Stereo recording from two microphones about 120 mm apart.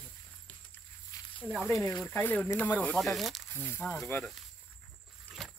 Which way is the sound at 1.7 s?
25° left (ahead or behind).